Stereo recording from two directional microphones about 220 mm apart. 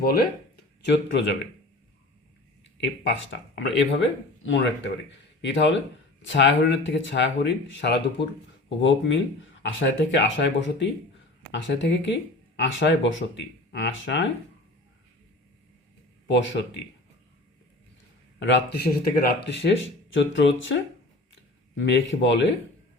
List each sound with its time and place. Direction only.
0.0 s speech: 45° left (ahead or behind)
3.3 s speech: 55° left (ahead or behind)
16.2 s speech: 55° left (ahead or behind)
18.3 s speech: 55° left (ahead or behind)
21.8 s speech: 55° left (ahead or behind)